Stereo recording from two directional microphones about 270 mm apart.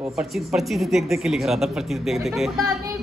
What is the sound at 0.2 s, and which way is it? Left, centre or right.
Speech, centre.